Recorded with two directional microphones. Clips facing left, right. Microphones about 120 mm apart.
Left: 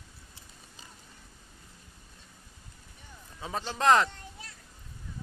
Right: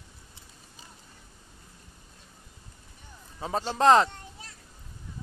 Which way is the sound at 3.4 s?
35° right (ahead or behind).